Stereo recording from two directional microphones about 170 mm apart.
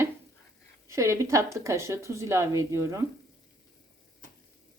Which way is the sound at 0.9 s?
15° right (ahead or behind).